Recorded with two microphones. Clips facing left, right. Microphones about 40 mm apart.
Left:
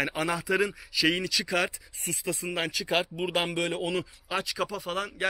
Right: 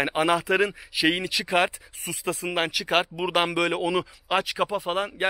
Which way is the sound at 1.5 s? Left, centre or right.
Right.